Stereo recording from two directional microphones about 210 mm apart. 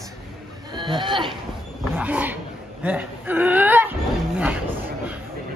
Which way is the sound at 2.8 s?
10° right (ahead or behind).